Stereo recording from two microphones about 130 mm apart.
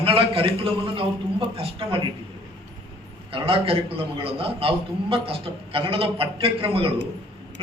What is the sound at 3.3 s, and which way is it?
A man's voice, 45° right (ahead or behind).